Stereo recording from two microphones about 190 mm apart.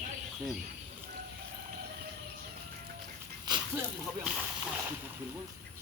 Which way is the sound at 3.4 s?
20° right (ahead or behind).